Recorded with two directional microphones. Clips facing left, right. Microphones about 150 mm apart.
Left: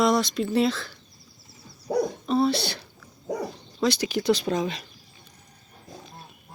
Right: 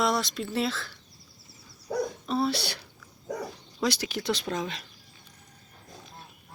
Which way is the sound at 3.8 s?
5° right (ahead or behind).